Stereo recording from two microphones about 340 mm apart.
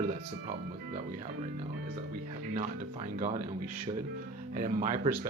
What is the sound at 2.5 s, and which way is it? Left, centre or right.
Speech, right.